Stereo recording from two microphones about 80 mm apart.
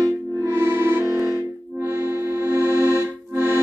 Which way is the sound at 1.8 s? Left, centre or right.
Right.